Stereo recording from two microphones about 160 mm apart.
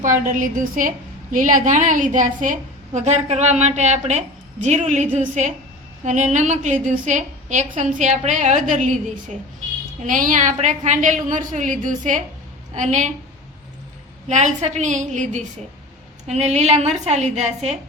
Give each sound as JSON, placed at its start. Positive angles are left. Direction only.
{"t": 0.3, "sound": "a woman's voice", "side_deg": -55}
{"t": 10.0, "sound": "a woman's voice", "side_deg": -55}
{"t": 14.3, "sound": "a woman's voice", "side_deg": -50}